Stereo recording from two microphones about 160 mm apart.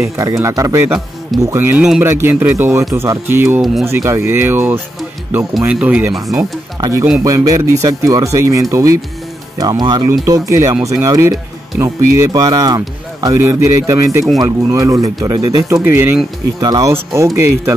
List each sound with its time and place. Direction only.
0.0 s speech: 20° right (ahead or behind)
6.8 s speech: 20° right (ahead or behind)
16.5 s speech: 25° right (ahead or behind)